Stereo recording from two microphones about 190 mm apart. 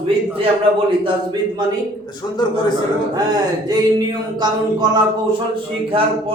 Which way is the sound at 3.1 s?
20° right (ahead or behind).